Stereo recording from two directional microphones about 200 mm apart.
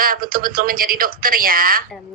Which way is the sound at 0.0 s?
45° right (ahead or behind).